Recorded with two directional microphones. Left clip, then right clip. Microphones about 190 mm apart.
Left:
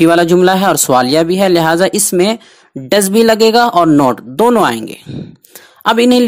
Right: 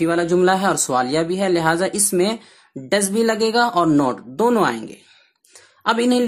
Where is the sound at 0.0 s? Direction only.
40° left (ahead or behind).